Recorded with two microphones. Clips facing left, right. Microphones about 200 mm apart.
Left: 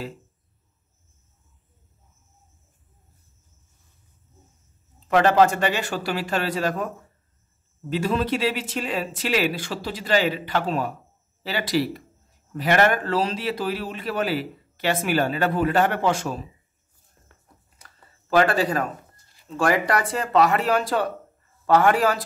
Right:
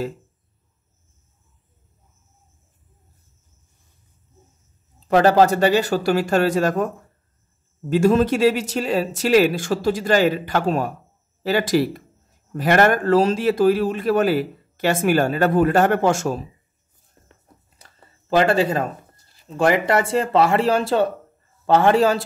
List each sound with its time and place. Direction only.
5.0 s speech: 35° right (ahead or behind)
7.9 s speech: 45° right (ahead or behind)
17.7 s a sound: 25° right (ahead or behind)
19.5 s speech: 25° right (ahead or behind)